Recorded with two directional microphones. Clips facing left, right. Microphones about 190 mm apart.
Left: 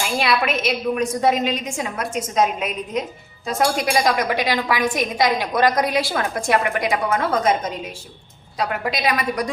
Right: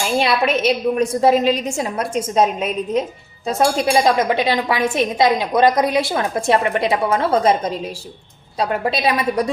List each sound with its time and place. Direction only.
0.2 s a woman's voice: 35° right (ahead or behind)